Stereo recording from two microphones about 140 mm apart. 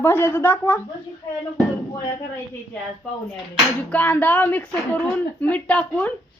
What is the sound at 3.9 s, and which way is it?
Speech, 10° left (ahead or behind).